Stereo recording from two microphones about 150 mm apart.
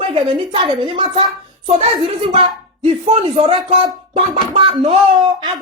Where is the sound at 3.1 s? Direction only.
40° right (ahead or behind).